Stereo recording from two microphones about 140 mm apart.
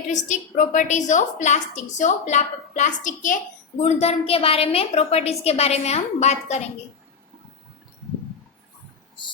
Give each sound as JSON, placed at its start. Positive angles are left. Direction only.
{"t": 0.1, "sound": "a woman's voice", "side_deg": 60}
{"t": 3.8, "sound": "a woman's voice", "side_deg": 50}